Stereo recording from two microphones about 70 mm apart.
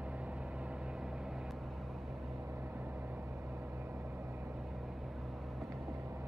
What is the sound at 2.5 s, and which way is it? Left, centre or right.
Vehicle, right.